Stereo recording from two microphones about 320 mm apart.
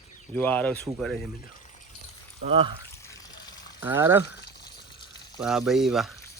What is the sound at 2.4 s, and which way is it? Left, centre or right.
Speech, centre.